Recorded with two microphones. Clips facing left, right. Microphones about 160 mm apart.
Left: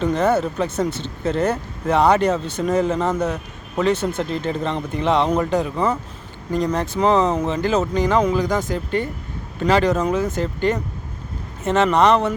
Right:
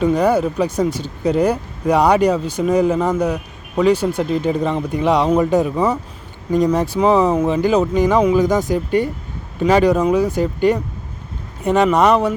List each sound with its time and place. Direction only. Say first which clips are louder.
0.0 s speech: right 3 dB; 10° right (ahead or behind)